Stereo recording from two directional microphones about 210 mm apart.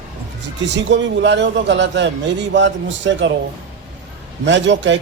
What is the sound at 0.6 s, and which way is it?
Speech, 55° right (ahead or behind).